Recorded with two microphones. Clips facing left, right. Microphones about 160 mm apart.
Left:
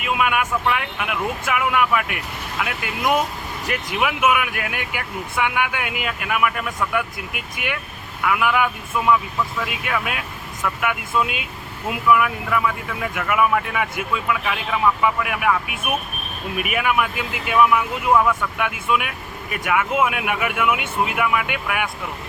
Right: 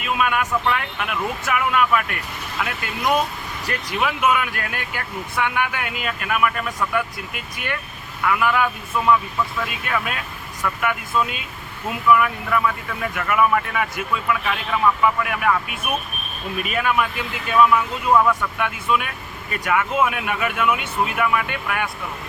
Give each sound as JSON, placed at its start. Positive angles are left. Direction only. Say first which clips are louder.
{"t": 0.0, "sound": "speech", "louder": "left 1 dB", "side_deg": 15}